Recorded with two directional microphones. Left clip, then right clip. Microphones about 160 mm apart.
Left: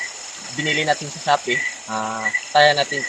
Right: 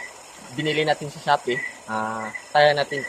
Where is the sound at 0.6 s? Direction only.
25° right (ahead or behind).